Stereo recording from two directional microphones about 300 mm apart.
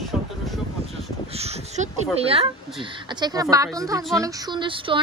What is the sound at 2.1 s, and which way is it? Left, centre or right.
Speech, centre.